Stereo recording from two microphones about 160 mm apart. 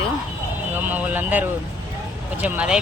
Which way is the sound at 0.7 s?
10° right (ahead or behind).